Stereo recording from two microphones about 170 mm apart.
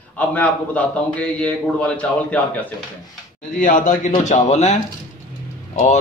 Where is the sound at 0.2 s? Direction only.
10° left (ahead or behind).